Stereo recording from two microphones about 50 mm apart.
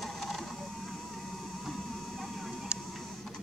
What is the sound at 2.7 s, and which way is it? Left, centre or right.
Printer, right.